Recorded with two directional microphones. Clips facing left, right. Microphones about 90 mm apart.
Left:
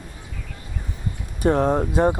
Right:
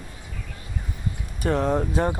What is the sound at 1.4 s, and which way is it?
Speech, 20° left (ahead or behind).